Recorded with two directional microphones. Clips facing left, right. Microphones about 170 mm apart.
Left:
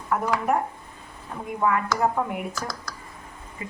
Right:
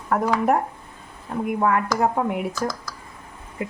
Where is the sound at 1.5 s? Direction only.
60° right (ahead or behind).